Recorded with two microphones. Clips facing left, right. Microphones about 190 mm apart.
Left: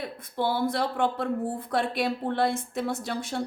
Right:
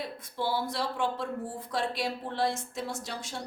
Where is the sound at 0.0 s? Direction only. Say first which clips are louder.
Left 4 dB; 55° left (ahead or behind).